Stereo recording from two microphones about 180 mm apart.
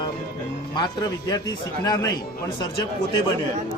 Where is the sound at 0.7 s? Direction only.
25° left (ahead or behind).